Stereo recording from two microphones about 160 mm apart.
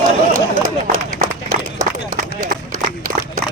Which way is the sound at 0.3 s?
20° right (ahead or behind).